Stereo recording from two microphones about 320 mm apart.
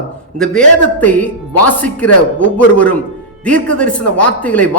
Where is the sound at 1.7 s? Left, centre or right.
Centre.